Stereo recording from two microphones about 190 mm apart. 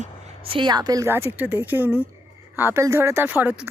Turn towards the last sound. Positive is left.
turn(degrees=-10)  # may be behind; listen again after turning